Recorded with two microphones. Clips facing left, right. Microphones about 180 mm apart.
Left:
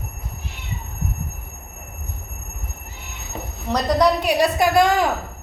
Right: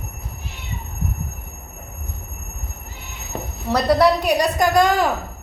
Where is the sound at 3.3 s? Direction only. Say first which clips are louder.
Right 3 dB; 60° right (ahead or behind).